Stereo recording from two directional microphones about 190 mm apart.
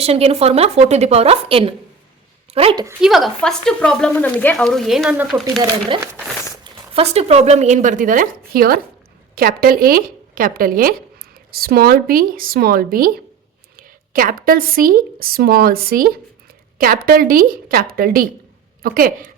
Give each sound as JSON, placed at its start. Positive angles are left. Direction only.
{"t": 0.0, "sound": "a woman's voice", "side_deg": -30}
{"t": 3.0, "sound": "speech", "side_deg": 0}
{"t": 6.7, "sound": "speech", "side_deg": -30}